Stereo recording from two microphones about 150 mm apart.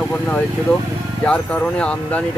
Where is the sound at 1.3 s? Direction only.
10° left (ahead or behind).